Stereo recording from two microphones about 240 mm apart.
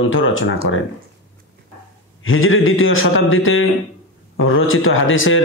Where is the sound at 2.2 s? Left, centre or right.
Left.